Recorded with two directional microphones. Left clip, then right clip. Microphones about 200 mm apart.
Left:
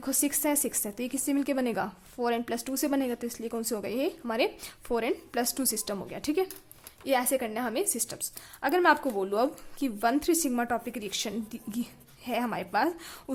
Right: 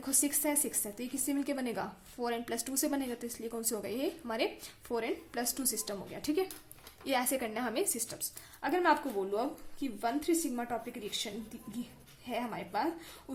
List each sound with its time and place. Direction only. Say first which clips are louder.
0.0 s speech: left 4 dB; 25° left (ahead or behind)